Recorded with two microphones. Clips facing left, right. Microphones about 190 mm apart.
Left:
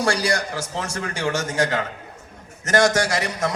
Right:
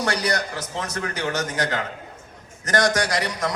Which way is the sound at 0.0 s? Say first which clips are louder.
Left 2 dB; 30° left (ahead or behind).